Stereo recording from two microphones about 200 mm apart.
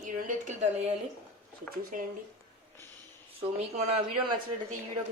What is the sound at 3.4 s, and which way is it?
Speech, 30° right (ahead or behind).